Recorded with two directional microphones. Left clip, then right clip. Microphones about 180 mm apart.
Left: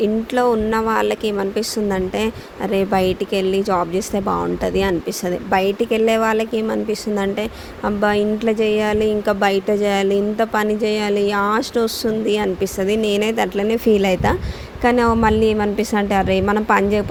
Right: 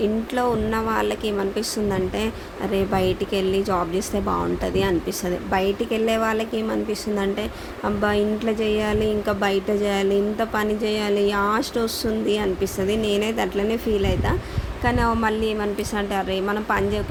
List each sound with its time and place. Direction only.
0.0 s a woman's voice: 40° left (ahead or behind)
7.9 s a woman's voice: 40° left (ahead or behind)